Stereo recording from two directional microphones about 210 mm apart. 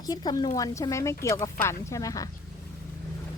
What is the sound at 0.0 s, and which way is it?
Speech, 20° left (ahead or behind).